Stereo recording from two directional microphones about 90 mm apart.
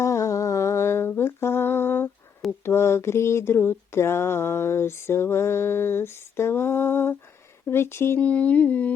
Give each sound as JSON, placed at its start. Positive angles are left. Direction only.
{"t": 0.0, "sound": "humming", "side_deg": 35}
{"t": 2.6, "sound": "a sound", "side_deg": 30}
{"t": 8.2, "sound": "speech", "side_deg": 15}